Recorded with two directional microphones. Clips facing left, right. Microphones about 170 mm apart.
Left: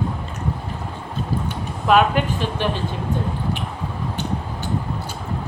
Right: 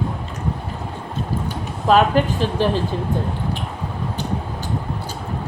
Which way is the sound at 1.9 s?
35° right (ahead or behind).